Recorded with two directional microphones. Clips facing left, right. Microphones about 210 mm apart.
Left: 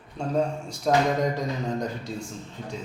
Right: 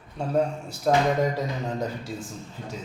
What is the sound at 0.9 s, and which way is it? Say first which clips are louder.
A man's voice: right 1 dB; centre (ahead or behind).